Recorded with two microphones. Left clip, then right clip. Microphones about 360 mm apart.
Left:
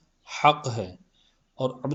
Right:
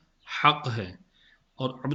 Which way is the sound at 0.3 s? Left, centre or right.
Centre.